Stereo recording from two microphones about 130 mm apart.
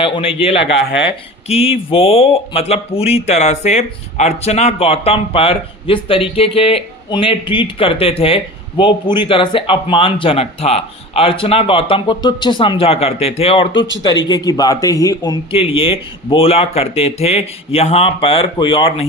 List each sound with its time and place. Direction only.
0.0 s speech: 45° left (ahead or behind)
15.5 s speech: 45° left (ahead or behind)